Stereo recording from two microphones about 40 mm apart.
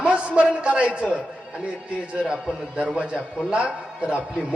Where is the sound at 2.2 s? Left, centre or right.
Centre.